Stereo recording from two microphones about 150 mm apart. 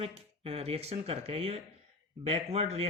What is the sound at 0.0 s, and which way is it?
Speech, 40° right (ahead or behind).